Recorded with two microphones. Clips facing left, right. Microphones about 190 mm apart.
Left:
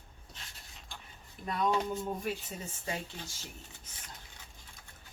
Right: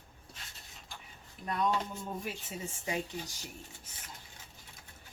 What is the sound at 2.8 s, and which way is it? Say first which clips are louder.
Speech: right 4 dB; 15° right (ahead or behind).